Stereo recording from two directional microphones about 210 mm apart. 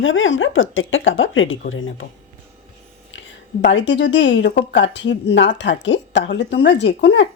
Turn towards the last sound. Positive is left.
turn(degrees=55)  # may be behind; listen again after turning